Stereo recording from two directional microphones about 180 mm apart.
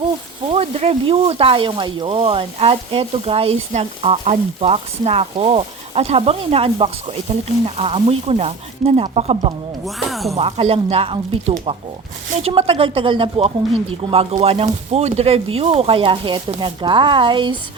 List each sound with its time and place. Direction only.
0.0 s speech: 30° right (ahead or behind)
9.8 s speech: centre (ahead or behind)
10.3 s speech: 30° right (ahead or behind)